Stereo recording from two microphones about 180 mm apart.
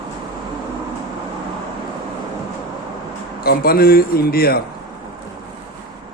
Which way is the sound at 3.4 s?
55° left (ahead or behind).